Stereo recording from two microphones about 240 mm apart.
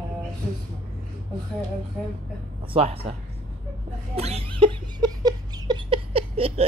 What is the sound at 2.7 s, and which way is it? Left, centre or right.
Speech, right.